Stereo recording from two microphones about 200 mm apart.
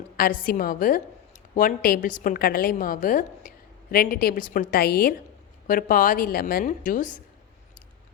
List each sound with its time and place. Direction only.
0.2 s a woman's voice: 45° left (ahead or behind)